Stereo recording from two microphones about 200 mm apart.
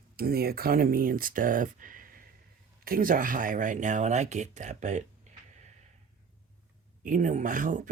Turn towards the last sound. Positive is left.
turn(degrees=-40)  # may be behind; listen again after turning